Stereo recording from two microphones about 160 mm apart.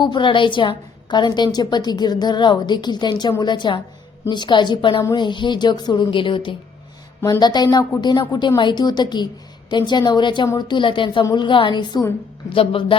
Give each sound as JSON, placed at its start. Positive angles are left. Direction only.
{"t": 0.0, "sound": "a woman's voice", "side_deg": 30}